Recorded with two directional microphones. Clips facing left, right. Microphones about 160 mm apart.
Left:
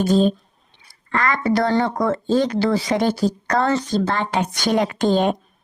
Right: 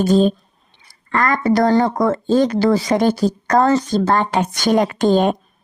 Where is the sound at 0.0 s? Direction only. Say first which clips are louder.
Right 3 dB; 45° right (ahead or behind).